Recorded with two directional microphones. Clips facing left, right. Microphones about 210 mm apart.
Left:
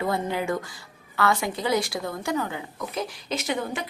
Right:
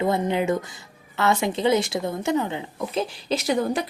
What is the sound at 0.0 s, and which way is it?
A woman's voice, 20° right (ahead or behind).